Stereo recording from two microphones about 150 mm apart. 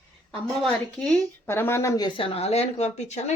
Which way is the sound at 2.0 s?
35° left (ahead or behind).